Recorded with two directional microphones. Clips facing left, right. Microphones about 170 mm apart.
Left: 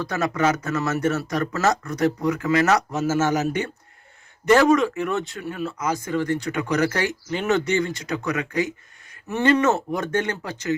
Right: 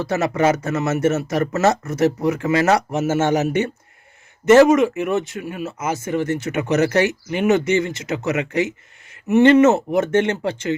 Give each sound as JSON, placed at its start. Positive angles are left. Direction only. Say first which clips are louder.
{"t": 0.0, "sound": "speech", "louder": "right 4 dB", "side_deg": -25}